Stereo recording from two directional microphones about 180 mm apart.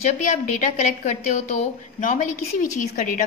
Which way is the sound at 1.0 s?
40° left (ahead or behind).